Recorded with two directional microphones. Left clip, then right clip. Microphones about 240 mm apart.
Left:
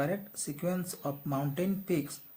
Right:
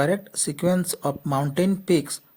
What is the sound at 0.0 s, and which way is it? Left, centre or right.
Speech, right.